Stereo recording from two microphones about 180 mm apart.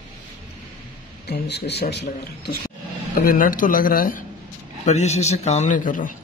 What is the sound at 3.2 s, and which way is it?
A man's voice, 50° left (ahead or behind).